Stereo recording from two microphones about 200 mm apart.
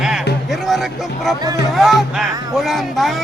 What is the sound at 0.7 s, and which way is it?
Speech, centre (ahead or behind).